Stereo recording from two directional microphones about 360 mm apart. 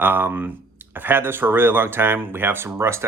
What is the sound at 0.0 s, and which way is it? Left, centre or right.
Speech, centre.